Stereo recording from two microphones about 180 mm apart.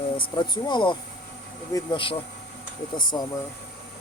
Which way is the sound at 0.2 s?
25° left (ahead or behind).